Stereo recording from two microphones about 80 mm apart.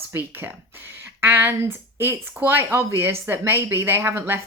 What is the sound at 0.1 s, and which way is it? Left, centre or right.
Speech, right.